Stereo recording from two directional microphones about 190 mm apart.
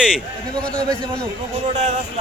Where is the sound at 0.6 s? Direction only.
5° left (ahead or behind).